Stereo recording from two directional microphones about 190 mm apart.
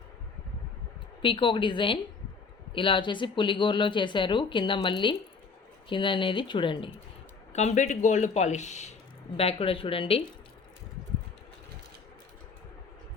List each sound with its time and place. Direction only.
1.2 s speech: 25° left (ahead or behind)
7.5 s speech: 35° left (ahead or behind)